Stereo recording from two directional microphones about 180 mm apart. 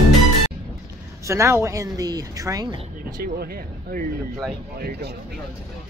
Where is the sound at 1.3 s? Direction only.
15° right (ahead or behind).